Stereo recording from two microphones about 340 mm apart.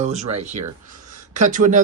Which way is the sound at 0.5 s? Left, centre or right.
Right.